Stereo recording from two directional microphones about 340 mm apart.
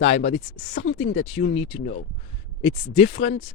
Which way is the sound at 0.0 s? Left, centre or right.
Centre.